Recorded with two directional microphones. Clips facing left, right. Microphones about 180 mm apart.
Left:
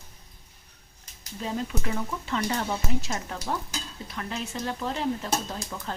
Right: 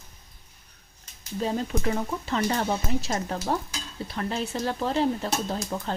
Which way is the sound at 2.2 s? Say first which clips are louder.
Right 3 dB; 35° right (ahead or behind).